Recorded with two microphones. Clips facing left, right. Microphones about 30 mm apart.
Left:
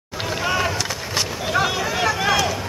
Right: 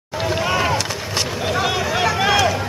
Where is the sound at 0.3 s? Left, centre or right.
Centre.